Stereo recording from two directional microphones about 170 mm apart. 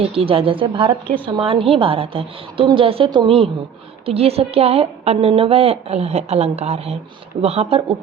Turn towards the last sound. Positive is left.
turn(degrees=-35)  # may be behind; listen again after turning